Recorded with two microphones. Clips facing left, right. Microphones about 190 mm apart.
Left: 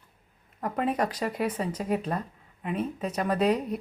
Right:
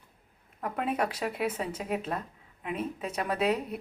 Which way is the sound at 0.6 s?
5° right (ahead or behind).